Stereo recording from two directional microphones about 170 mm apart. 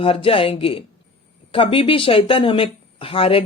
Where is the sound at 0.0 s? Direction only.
35° left (ahead or behind).